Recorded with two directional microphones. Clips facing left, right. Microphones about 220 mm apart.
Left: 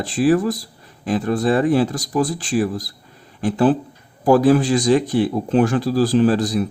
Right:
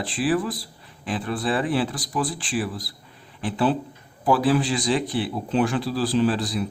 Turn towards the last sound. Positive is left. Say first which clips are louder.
# left 6 dB
turn(degrees=45)  # may be behind; listen again after turning